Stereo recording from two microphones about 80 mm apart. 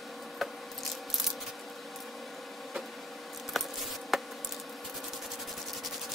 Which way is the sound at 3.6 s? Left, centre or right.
Centre.